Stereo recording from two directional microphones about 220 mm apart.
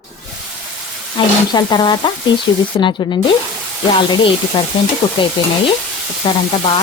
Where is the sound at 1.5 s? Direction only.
20° left (ahead or behind).